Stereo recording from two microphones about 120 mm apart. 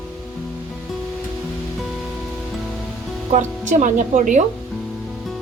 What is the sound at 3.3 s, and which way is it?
A woman's voice, 90° right.